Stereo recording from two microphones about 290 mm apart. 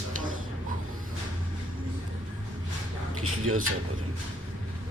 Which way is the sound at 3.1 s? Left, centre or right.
Right.